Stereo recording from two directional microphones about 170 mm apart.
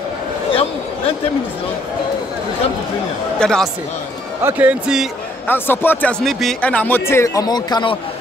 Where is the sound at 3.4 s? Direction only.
5° left (ahead or behind).